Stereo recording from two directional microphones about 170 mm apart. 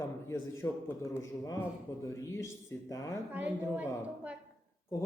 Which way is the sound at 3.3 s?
10° right (ahead or behind).